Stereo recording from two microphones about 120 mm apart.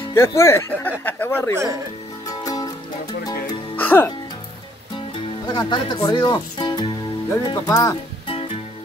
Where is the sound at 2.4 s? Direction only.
30° left (ahead or behind).